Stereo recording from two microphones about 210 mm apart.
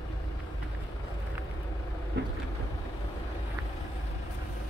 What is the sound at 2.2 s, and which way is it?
Vehicle, 55° right (ahead or behind).